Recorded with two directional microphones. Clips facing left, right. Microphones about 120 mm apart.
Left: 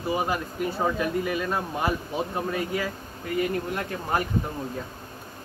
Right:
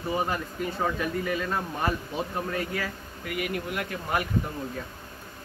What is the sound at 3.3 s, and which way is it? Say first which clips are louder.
Speech: left 4 dB; 30° left (ahead or behind).